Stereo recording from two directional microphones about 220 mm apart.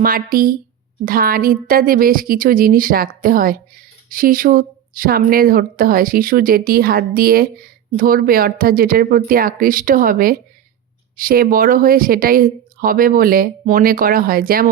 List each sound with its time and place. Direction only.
0.0 s a woman's voice: 40° right (ahead or behind)